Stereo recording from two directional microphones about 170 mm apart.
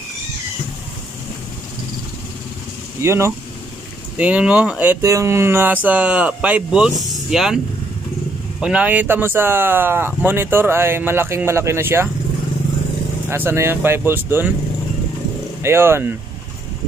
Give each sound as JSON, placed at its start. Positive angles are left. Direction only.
{"t": 3.0, "sound": "speech", "side_deg": -15}
{"t": 13.3, "sound": "speech", "side_deg": -15}
{"t": 15.6, "sound": "speech", "side_deg": -15}